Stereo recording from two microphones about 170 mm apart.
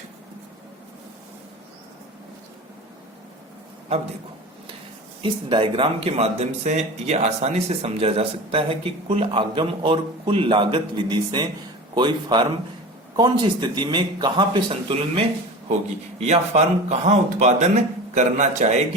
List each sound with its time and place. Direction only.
5.2 s speech: 30° right (ahead or behind)
16.2 s a man's voice: 40° right (ahead or behind)